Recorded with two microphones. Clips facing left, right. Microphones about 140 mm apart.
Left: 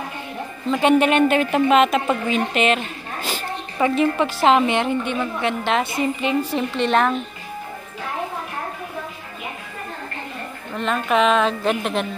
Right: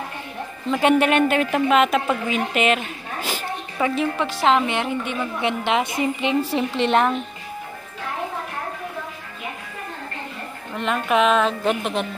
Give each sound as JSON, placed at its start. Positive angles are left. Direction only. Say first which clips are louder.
{"t": 0.7, "sound": "a woman's voice", "louder": "left 1 dB", "side_deg": -5}
{"t": 5.4, "sound": "a woman's voice", "louder": "right 1 dB", "side_deg": -20}
{"t": 10.8, "sound": "a woman's voice", "louder": "left 1 dB", "side_deg": -10}